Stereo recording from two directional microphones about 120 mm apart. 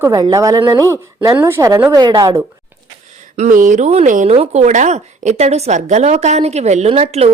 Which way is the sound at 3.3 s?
90° right.